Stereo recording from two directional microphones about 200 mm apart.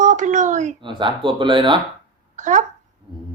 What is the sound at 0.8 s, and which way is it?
Speech, 25° right (ahead or behind).